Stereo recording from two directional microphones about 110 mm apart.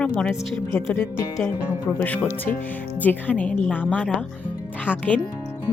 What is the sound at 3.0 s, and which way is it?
Speech, 15° left (ahead or behind).